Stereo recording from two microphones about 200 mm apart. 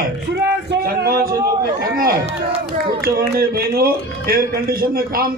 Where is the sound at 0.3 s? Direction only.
55° right (ahead or behind).